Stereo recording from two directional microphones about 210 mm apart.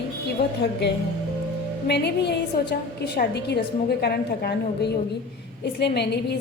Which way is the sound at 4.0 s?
50° left (ahead or behind).